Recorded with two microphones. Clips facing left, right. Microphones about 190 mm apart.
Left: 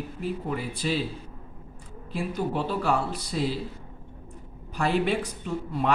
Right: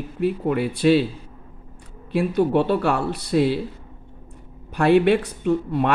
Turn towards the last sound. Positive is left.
turn(degrees=-65)  # may be behind; listen again after turning